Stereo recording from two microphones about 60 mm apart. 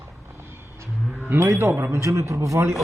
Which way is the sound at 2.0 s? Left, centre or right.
Right.